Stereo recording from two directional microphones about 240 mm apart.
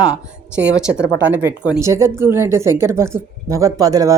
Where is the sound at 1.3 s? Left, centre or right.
Centre.